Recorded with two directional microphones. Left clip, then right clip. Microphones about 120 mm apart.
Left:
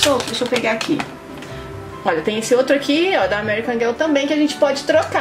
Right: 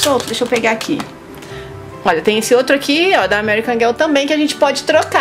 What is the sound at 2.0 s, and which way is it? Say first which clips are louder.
A woman's voice: right 6 dB; 40° right (ahead or behind).